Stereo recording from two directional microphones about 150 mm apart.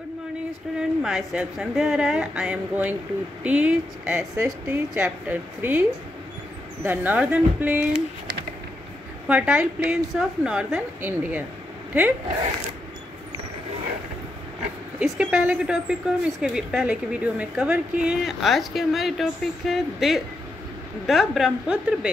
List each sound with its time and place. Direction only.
0.7 s a woman's voice: 5° right (ahead or behind)
9.3 s a woman's voice: 5° right (ahead or behind)
15.0 s speech: 5° right (ahead or behind)